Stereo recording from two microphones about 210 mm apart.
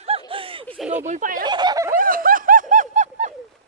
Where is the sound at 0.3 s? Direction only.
25° right (ahead or behind).